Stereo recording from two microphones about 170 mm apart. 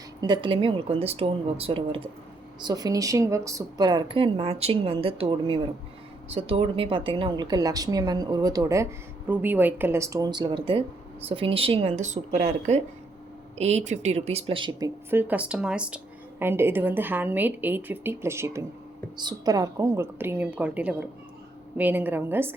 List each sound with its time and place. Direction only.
0.2 s speech: 25° right (ahead or behind)
2.6 s a woman's voice: 20° right (ahead or behind)
15.1 s a woman's voice: 10° right (ahead or behind)